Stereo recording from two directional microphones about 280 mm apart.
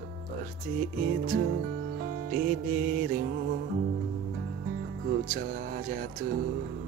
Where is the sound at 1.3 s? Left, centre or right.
Right.